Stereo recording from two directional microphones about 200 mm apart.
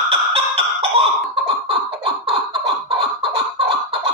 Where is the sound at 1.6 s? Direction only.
25° right (ahead or behind).